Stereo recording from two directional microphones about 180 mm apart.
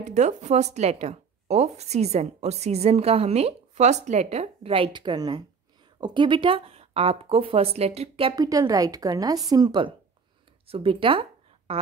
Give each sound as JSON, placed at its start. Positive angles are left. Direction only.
{"t": 0.0, "sound": "a woman's voice", "side_deg": -40}